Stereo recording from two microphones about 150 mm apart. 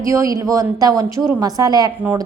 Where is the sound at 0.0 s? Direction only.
20° right (ahead or behind).